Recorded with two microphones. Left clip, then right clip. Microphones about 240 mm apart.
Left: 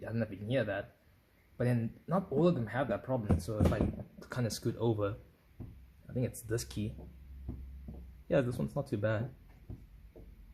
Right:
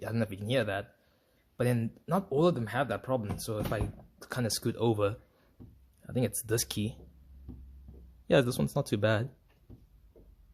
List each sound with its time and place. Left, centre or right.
0.0 s speech: right
6.1 s speech: right
8.3 s speech: right